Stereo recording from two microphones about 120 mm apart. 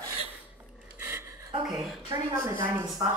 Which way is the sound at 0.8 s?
20° right (ahead or behind).